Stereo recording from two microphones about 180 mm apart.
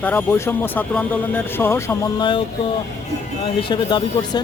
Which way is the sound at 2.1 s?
25° left (ahead or behind).